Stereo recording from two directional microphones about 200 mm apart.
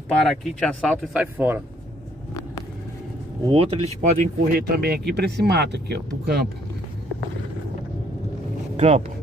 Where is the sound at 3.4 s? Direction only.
25° right (ahead or behind).